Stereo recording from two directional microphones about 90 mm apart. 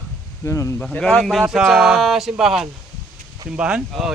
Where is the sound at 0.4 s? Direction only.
35° left (ahead or behind).